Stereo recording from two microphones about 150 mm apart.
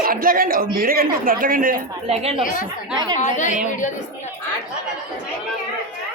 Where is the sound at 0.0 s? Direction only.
75° right (ahead or behind).